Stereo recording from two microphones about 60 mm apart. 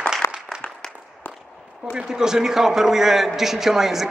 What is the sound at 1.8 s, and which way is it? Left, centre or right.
A man's voice, centre.